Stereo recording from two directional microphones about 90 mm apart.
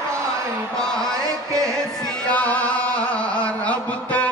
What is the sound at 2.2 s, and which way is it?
Music, 15° left (ahead or behind).